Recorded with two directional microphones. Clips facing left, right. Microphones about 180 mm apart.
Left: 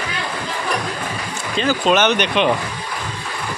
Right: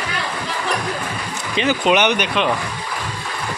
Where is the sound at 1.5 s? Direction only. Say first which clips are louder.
Even; 15° right (ahead or behind).